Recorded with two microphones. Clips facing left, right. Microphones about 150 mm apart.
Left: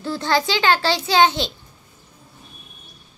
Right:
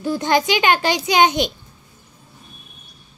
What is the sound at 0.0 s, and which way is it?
A child's voice, 15° right (ahead or behind).